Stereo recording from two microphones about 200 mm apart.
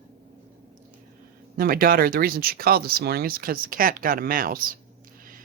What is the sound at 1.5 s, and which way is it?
Speech, 45° right (ahead or behind).